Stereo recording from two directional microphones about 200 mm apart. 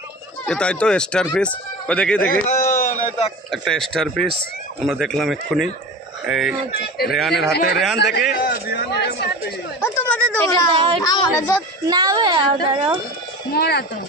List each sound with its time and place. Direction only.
0.5 s speech: 5° left (ahead or behind)
2.2 s a sound: 35° left (ahead or behind)
3.5 s speech: centre (ahead or behind)
8.0 s a man's voice: 50° left (ahead or behind)
9.8 s a sound: 10° left (ahead or behind)
10.3 s speech: 15° left (ahead or behind)
11.9 s a woman's voice: 20° right (ahead or behind)
13.5 s speech: 55° left (ahead or behind)